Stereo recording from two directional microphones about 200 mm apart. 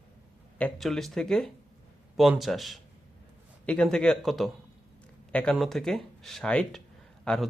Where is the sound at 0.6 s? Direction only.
Centre (ahead or behind).